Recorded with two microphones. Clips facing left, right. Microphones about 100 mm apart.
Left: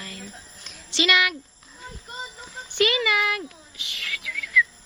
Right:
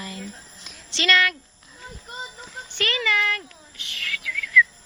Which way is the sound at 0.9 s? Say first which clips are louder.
Right 1 dB; 15° left (ahead or behind).